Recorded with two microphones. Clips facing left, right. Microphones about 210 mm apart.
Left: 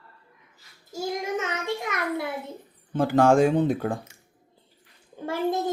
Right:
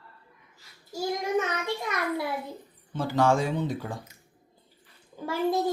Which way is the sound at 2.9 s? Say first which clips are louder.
Left 5 dB; 55° left (ahead or behind).